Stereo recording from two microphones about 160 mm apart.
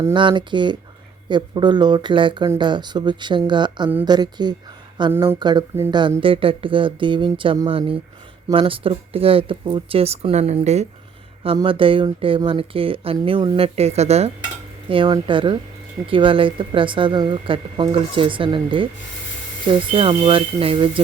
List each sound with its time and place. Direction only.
0.1 s speech: 30° right (ahead or behind)
5.1 s a woman's voice: 15° right (ahead or behind)
5.4 s speech: 25° right (ahead or behind)
13.6 s speech: 40° right (ahead or behind)
14.8 s speech: 30° right (ahead or behind)